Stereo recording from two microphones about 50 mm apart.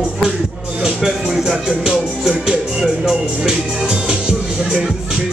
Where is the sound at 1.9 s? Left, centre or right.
Centre.